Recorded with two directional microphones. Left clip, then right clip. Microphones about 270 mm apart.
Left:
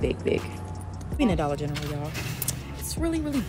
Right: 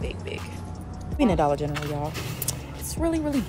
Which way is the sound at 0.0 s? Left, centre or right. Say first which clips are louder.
Left 8 dB; left.